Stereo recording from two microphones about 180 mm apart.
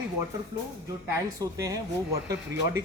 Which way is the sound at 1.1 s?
20° right (ahead or behind).